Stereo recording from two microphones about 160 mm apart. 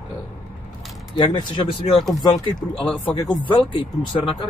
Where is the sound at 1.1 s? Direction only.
30° left (ahead or behind).